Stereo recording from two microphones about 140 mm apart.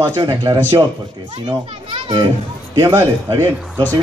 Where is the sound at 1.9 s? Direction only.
35° right (ahead or behind).